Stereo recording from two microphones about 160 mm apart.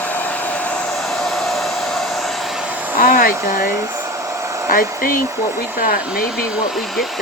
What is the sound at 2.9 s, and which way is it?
Hair dryer, 60° left (ahead or behind).